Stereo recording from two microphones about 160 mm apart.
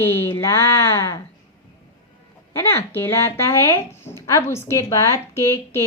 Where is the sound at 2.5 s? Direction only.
15° left (ahead or behind).